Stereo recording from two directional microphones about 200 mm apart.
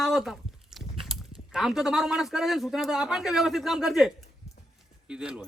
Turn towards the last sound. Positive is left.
turn(degrees=-5)  # may be behind; listen again after turning